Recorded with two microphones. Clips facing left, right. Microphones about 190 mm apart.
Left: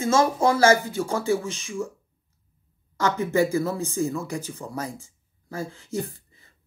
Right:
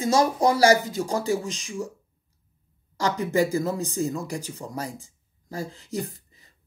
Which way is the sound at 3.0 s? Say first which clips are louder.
Left 1 dB; 35° right (ahead or behind).